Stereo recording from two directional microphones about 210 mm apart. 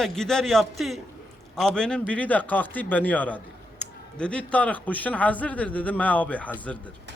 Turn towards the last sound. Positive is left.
turn(degrees=5)  # may be behind; listen again after turning